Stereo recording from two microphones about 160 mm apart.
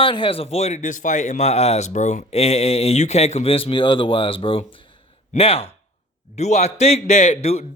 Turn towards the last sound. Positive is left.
turn(degrees=40)  # may be behind; listen again after turning